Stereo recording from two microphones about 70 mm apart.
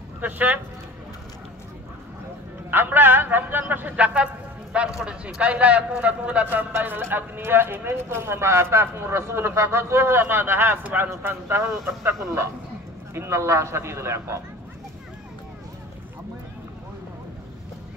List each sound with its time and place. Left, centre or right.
0.2 s a man's voice: right
2.7 s a man's voice: right
6.7 s a man's voice: right
11.1 s a man's voice: right